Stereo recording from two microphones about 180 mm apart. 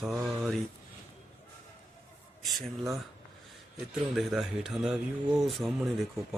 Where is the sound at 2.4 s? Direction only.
Centre (ahead or behind).